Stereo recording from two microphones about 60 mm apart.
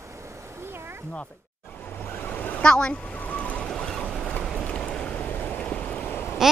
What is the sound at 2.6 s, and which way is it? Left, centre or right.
Speech, centre.